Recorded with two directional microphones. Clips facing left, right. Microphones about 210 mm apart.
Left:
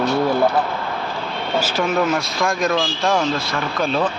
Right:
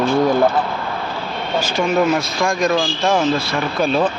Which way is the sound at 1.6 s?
5° left (ahead or behind).